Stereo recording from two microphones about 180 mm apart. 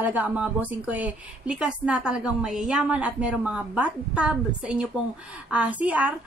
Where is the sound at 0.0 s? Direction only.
10° right (ahead or behind).